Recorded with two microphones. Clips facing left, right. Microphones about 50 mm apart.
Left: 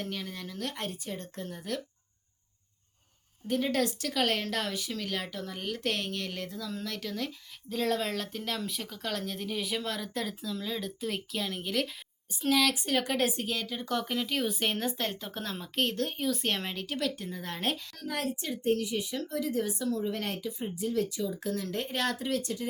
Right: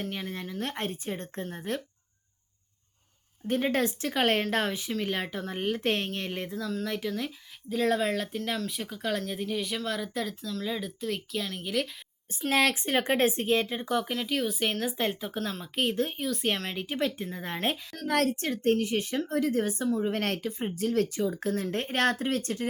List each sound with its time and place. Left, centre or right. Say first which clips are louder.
0.0 s a sound: right 3 dB; centre
0.7 s speech: right 4 dB; right
3.4 s speech: right 2 dB; right; by 10.6 s centre
10.6 s speech: right 4 dB; centre
12.5 s speech: right 2 dB; right
13.8 s speech: right 2 dB; centre
14.9 s speech: right 4 dB; centre
16.7 s speech: right 3 dB; centre
17.9 s speech: right 7 dB; right